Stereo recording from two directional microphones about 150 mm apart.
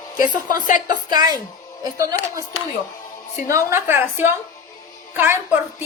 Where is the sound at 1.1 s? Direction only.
25° right (ahead or behind).